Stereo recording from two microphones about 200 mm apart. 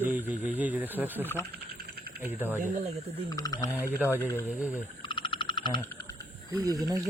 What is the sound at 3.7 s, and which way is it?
Speech, 10° right (ahead or behind).